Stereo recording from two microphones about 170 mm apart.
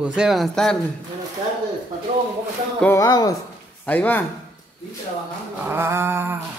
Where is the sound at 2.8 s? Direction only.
20° left (ahead or behind).